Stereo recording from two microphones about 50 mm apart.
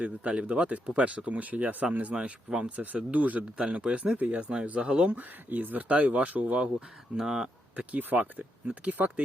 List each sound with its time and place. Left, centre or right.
0.0 s speech: right
5.1 s speech: right
7.2 s speech: centre
7.8 s speech: right